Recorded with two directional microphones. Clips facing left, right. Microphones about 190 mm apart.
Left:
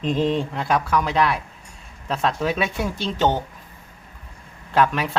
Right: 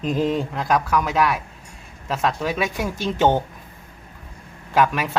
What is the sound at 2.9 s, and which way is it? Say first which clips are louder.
Speech: right 2 dB; 45° right (ahead or behind).